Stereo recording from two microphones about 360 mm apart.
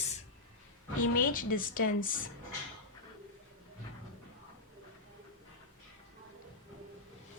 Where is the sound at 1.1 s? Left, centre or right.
Left.